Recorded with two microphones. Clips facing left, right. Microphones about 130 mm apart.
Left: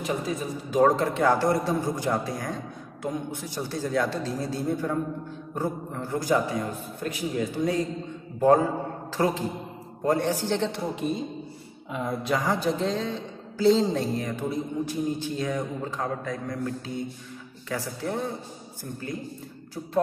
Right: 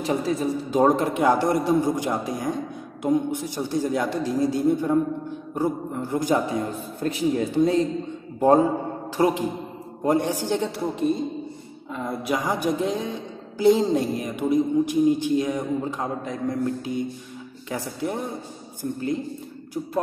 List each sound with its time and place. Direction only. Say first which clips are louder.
0.0 s a man's voice: right 5 dB; 30° right (ahead or behind); by 10.8 s 15° right (ahead or behind)
11.0 s a woman's voice: right 5 dB; centre (ahead or behind)
12.2 s a man's voice: right 2 dB; 15° right (ahead or behind)